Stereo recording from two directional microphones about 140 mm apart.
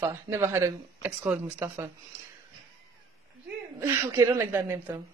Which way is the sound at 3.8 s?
20° right (ahead or behind).